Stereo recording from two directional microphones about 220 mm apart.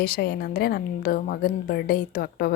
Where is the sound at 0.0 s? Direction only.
45° left (ahead or behind).